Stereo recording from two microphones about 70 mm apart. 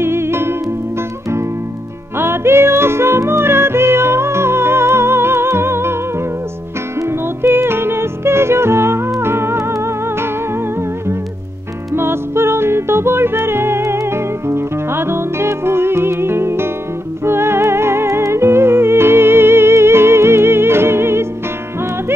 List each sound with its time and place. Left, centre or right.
0.0 s music: right
2.1 s music: right
7.0 s music: right
11.9 s music: right